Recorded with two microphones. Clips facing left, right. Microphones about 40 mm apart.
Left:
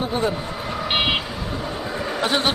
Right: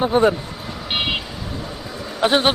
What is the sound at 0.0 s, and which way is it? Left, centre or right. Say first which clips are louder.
Speech: right 7 dB; right.